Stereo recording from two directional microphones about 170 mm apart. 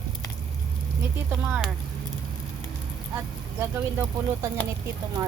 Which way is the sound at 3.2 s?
10° right (ahead or behind).